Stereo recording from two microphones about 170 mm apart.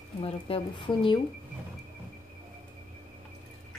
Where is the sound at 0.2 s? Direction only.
30° left (ahead or behind).